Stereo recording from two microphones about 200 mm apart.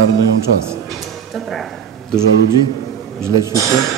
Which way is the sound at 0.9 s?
Centre (ahead or behind).